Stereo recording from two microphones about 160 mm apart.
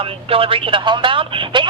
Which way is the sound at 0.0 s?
35° right (ahead or behind).